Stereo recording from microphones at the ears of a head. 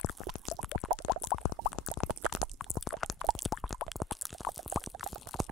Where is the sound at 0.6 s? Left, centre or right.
Left.